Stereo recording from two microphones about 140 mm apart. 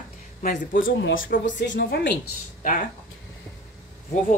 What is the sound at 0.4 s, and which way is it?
Speech, 85° left.